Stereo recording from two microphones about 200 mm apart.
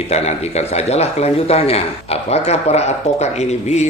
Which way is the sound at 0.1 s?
35° left (ahead or behind).